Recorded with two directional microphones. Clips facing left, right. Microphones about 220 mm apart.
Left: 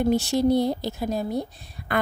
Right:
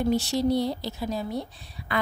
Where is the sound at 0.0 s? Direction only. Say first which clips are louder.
Left 3 dB; 50° left (ahead or behind).